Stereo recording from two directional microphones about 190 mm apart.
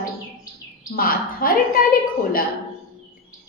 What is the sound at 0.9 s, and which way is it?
Speech, 50° left (ahead or behind).